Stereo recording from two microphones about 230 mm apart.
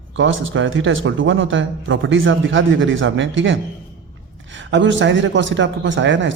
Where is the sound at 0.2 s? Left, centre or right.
Right.